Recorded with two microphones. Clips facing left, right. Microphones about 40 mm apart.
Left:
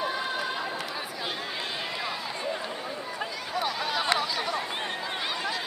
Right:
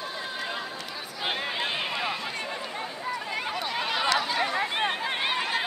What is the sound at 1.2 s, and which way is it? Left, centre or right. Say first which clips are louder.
Run: right 7 dB; right.